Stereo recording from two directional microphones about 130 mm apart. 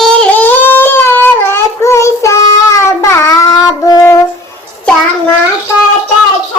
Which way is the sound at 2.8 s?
20° left (ahead or behind).